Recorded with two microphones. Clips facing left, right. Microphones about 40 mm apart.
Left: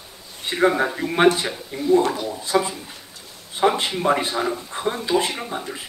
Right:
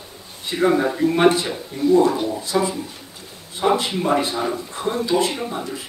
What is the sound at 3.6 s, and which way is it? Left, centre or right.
A man's voice, centre.